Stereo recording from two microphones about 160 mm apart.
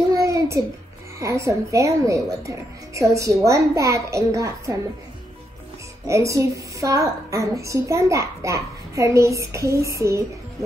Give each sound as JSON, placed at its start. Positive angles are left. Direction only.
{"t": 0.1, "sound": "child singing", "side_deg": -20}
{"t": 1.2, "sound": "a woman's voice", "side_deg": -20}
{"t": 6.0, "sound": "a woman's voice", "side_deg": -20}